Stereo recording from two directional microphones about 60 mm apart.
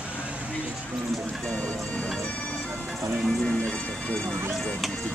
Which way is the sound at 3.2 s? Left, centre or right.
Centre.